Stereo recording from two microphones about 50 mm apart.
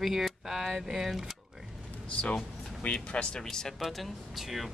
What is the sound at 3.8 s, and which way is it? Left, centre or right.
Speech, centre.